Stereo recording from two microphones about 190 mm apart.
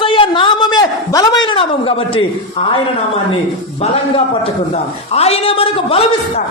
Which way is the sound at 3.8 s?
30° left (ahead or behind).